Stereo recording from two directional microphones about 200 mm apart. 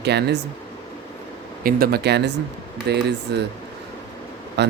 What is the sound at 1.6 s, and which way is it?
Speech, 45° right (ahead or behind).